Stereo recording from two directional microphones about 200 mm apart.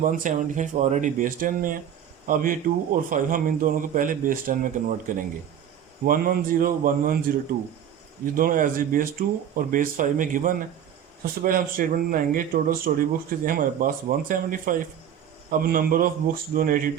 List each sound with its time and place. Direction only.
0.0 s speech: 40° right (ahead or behind)
8.2 s speech: 45° right (ahead or behind)